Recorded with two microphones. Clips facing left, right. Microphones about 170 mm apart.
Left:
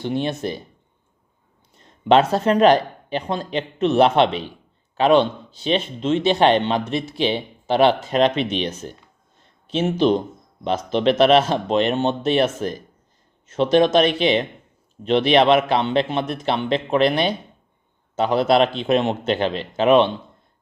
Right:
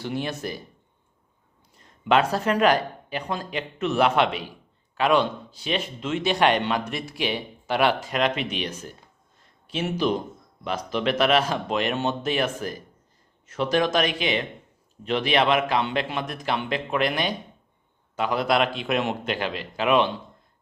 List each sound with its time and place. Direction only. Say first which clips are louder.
0.0 s speech: left 6 dB; 20° left (ahead or behind)
1.8 s speech: left 5 dB; 25° left (ahead or behind)
10.0 s speech: left 7 dB; 25° left (ahead or behind)